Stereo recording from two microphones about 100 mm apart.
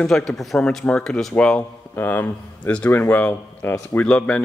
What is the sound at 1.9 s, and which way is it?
A man's voice, 20° left (ahead or behind).